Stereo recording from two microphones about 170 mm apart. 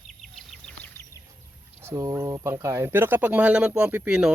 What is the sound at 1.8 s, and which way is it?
Speech, 20° right (ahead or behind).